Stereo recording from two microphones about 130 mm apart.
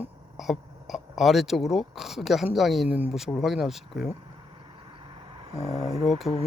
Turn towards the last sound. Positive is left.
turn(degrees=0)  # may be behind; listen again after turning